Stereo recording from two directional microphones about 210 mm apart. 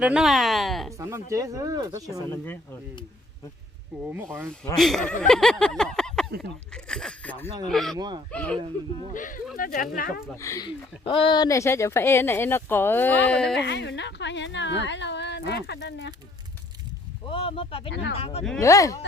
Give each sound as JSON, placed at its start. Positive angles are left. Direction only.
{"t": 0.0, "sound": "speech", "side_deg": -5}
{"t": 0.9, "sound": "speech", "side_deg": -15}
{"t": 2.3, "sound": "speech", "side_deg": 10}
{"t": 4.1, "sound": "speech", "side_deg": -10}
{"t": 4.8, "sound": "speech", "side_deg": 0}
{"t": 5.2, "sound": "a sound", "side_deg": 0}
{"t": 6.7, "sound": "speech", "side_deg": 5}
{"t": 7.9, "sound": "speech", "side_deg": -20}
{"t": 8.3, "sound": "speech", "side_deg": 5}
{"t": 9.1, "sound": "speech", "side_deg": 40}
{"t": 10.2, "sound": "speech", "side_deg": 15}
{"t": 13.6, "sound": "speech", "side_deg": 55}
{"t": 17.2, "sound": "speech", "side_deg": 25}
{"t": 18.6, "sound": "speech", "side_deg": 15}